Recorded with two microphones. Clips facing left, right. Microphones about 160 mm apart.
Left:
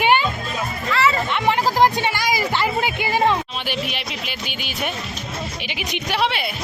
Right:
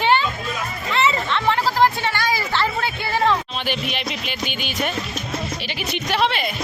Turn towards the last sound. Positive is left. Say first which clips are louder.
# right 1 dB
turn(degrees=10)  # may be behind; listen again after turning